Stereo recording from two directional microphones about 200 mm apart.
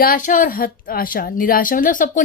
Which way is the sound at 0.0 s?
40° left (ahead or behind).